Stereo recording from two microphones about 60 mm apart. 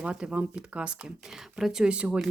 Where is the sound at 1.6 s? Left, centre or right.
Centre.